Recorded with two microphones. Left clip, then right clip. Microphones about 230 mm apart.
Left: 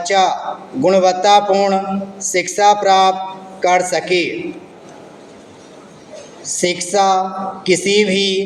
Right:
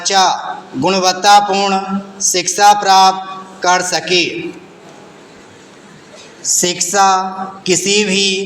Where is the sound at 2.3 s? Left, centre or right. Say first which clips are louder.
Left 1 dB; centre.